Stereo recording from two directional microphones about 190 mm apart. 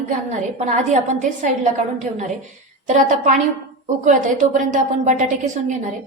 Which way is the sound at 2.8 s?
40° right (ahead or behind).